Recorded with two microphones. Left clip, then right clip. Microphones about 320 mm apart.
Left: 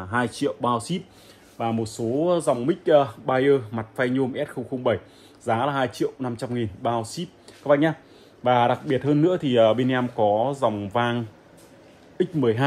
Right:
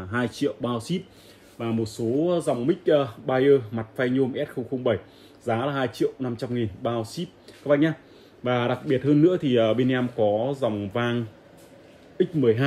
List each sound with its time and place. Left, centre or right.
0.1 s speech: centre
4.6 s speech: left
5.4 s a man's voice: centre
10.1 s speech: left
10.4 s speech: centre
12.4 s speech: centre